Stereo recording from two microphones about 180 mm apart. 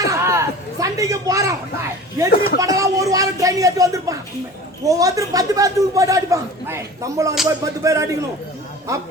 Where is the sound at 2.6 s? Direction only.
20° right (ahead or behind).